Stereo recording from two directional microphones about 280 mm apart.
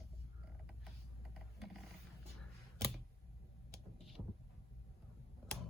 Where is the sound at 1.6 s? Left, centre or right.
Centre.